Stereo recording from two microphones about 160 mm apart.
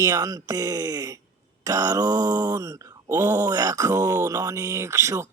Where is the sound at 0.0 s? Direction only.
20° right (ahead or behind).